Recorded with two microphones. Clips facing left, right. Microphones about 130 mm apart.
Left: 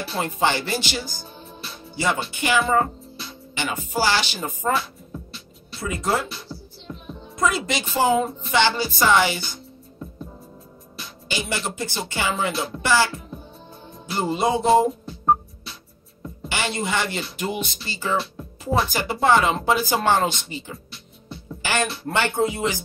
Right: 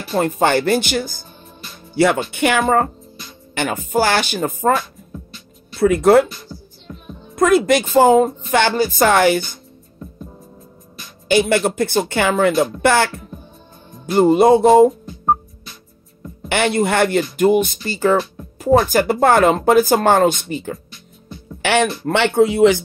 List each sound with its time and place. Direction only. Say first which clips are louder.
0.1 s speech: right 8 dB; 50° right (ahead or behind)
2.6 s a woman's voice: right 4 dB; 50° right (ahead or behind)
5.8 s speech: right 13 dB; 65° right (ahead or behind)
7.3 s speech: right 10 dB; 55° right (ahead or behind)
11.2 s speech: right 13 dB; 60° right (ahead or behind)
16.4 s speech: right 9 dB; 55° right (ahead or behind)
22.0 s speech: right 6 dB; 85° right